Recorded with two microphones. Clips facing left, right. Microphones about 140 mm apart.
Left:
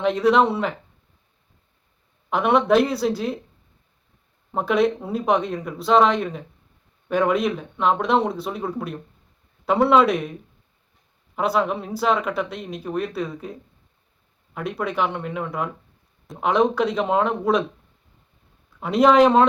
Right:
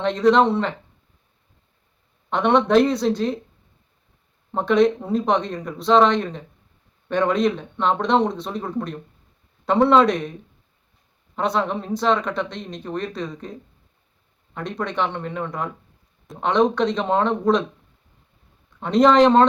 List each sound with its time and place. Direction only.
0.0 s speech: 5° left (ahead or behind)
2.3 s speech: 5° left (ahead or behind)
4.5 s speech: 5° left (ahead or behind)
11.3 s speech: 5° left (ahead or behind)
14.5 s speech: 5° left (ahead or behind)
18.8 s speech: 5° left (ahead or behind)